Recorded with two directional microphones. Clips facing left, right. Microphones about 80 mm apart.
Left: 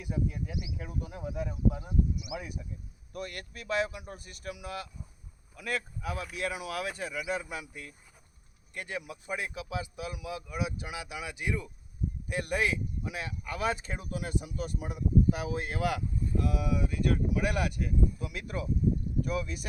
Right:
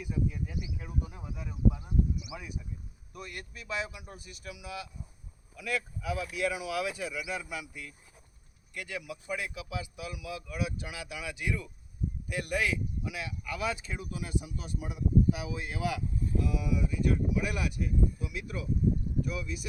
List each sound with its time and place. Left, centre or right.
0.0 s speech: left